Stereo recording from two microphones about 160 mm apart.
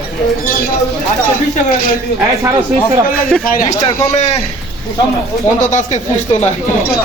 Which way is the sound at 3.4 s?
60° left (ahead or behind).